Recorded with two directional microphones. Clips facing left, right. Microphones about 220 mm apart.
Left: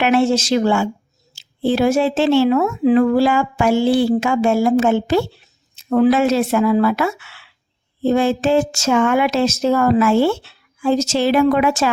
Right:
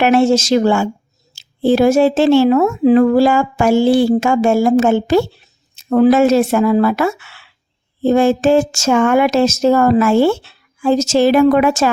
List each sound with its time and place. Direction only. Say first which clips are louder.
0.0 s a woman's voice: right 4 dB; 45° right (ahead or behind)